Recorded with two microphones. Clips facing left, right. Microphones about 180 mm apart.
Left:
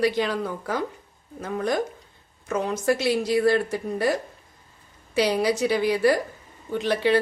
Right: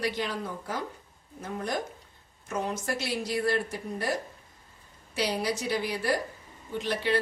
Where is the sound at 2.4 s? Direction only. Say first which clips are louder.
Left 8 dB; 90° left.